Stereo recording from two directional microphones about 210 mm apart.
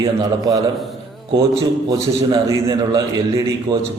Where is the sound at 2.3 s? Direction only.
20° right (ahead or behind).